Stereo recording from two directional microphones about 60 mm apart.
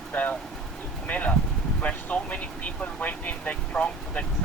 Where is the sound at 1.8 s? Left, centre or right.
Left.